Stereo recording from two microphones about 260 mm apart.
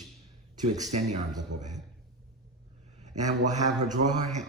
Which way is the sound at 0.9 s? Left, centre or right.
Right.